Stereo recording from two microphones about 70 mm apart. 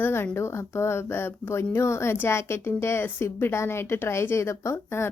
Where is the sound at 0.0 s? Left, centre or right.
Left.